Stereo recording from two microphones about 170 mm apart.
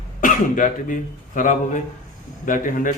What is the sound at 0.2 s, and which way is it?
A man's voice, 50° left (ahead or behind).